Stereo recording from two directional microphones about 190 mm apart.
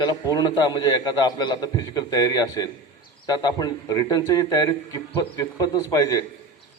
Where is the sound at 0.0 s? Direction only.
20° left (ahead or behind).